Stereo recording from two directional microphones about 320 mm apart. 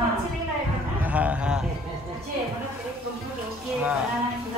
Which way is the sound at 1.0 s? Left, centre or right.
Centre.